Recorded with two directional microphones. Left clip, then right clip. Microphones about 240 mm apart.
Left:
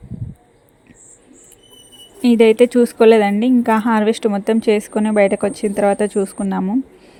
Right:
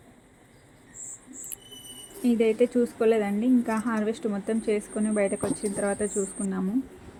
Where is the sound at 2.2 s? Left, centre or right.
Left.